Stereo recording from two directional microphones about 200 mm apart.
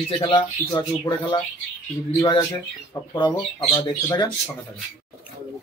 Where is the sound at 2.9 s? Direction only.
20° left (ahead or behind).